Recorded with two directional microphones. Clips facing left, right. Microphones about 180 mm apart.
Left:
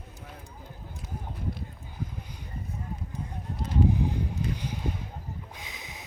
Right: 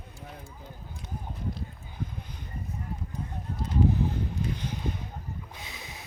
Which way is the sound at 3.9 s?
15° left (ahead or behind).